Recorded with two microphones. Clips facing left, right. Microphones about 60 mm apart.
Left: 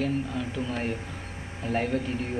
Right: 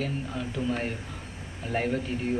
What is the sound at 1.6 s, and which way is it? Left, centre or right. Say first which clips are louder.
Speech: left 1 dB; centre.